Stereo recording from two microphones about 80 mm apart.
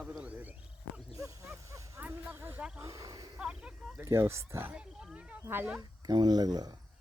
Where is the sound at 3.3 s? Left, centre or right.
Centre.